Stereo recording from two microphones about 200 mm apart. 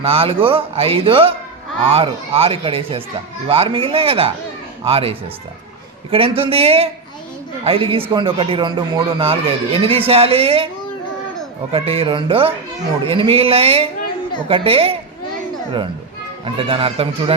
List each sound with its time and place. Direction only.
0.0 s speech: 30° right (ahead or behind)
11.7 s speech: 30° right (ahead or behind)
16.6 s speech: 25° right (ahead or behind)